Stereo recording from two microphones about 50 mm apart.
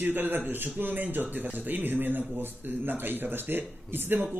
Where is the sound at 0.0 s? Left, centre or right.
Right.